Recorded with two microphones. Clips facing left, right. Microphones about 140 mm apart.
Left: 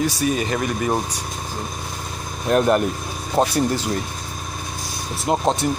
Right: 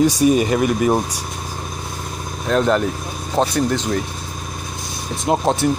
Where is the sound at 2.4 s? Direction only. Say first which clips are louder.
Even; 10° left (ahead or behind).